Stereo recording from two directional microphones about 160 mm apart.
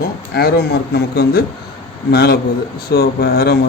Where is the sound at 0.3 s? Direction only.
80° left.